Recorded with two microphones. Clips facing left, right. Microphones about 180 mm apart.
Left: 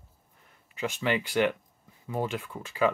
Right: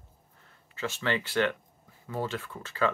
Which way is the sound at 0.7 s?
15° left (ahead or behind).